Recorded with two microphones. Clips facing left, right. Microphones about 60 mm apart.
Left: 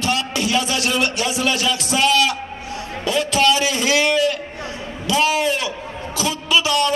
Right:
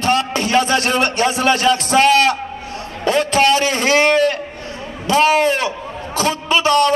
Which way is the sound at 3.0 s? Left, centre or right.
Right.